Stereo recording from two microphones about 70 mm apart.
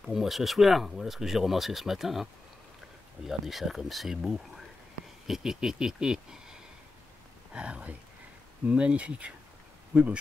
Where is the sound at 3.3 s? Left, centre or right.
Centre.